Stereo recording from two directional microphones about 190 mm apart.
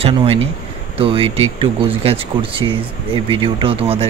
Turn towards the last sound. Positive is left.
turn(degrees=-30)  # may be behind; listen again after turning